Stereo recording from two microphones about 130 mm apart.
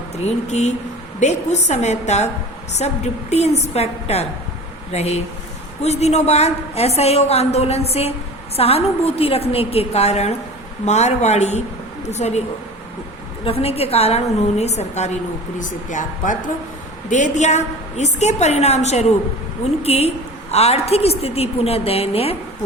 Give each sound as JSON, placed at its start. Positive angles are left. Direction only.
{"t": 0.3, "sound": "a woman's voice", "side_deg": 60}
{"t": 13.4, "sound": "a woman's voice", "side_deg": 50}